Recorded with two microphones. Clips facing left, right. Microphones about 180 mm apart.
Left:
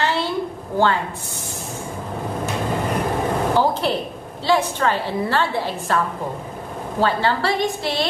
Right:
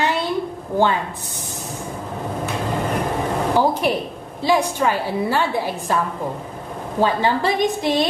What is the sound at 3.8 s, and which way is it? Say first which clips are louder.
A woman's voice: right 1 dB; 15° right (ahead or behind).